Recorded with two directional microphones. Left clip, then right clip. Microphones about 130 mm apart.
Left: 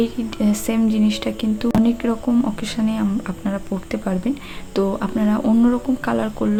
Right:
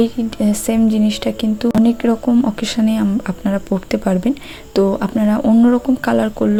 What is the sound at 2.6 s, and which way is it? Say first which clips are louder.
A woman's voice: right 5 dB; 40° right (ahead or behind).